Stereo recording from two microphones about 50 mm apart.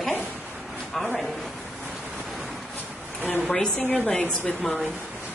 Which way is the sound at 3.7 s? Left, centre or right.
Left.